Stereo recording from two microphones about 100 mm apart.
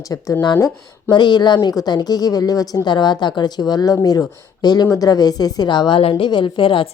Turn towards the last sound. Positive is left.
turn(degrees=60)  # may be behind; listen again after turning